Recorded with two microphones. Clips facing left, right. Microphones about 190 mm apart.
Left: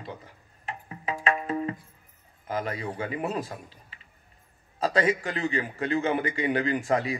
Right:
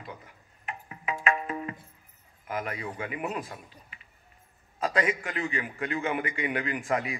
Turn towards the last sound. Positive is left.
turn(degrees=30)  # may be behind; listen again after turning